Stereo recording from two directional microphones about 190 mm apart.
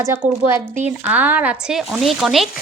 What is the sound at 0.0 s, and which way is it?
Speech, 15° right (ahead or behind).